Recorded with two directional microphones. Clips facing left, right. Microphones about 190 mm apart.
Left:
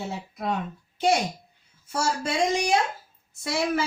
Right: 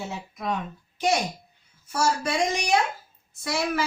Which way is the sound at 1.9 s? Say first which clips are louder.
Right 2 dB; 25° left (ahead or behind).